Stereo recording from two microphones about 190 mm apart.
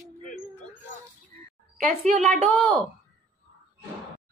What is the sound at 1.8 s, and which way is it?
Speech, 40° right (ahead or behind).